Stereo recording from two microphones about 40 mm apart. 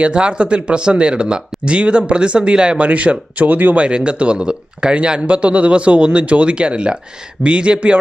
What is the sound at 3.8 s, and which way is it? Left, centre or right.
Speech, right.